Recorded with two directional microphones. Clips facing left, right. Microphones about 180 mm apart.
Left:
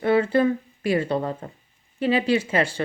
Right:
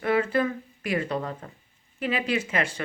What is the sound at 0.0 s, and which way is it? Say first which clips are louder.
Speech: left 5 dB; 30° left (ahead or behind).